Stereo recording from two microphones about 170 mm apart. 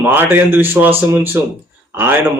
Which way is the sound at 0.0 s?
10° right (ahead or behind).